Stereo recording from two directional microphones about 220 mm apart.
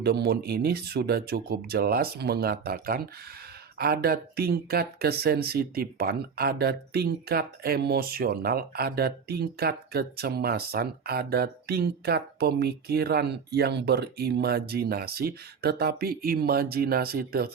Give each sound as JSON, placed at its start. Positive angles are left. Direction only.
{"t": 0.0, "sound": "speech", "side_deg": -45}